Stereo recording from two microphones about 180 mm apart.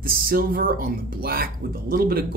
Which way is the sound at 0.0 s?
55° right (ahead or behind).